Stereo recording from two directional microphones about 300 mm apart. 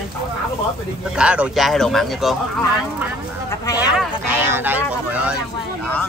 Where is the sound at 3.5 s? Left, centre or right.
Centre.